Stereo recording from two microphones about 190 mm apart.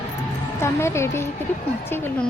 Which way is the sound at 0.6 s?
15° left (ahead or behind).